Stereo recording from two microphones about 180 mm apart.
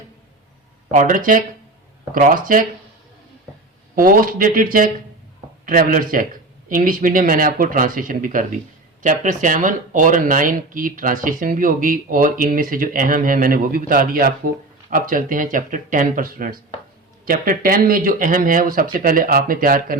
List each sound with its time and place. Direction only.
0.9 s speech: 50° right (ahead or behind)
3.9 s speech: 50° right (ahead or behind)